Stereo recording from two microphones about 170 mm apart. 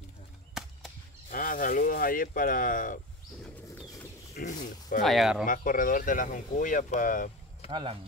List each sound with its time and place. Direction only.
0.6 s chop: 5° right (ahead or behind)
1.3 s speech: 55° left (ahead or behind)
3.4 s bird: 10° left (ahead or behind)
4.4 s speech: 50° left (ahead or behind)
5.0 s speech: centre (ahead or behind)
5.4 s speech: 55° left (ahead or behind)
7.7 s speech: 30° right (ahead or behind)